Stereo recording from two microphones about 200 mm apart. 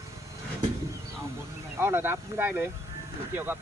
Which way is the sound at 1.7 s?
10° right (ahead or behind).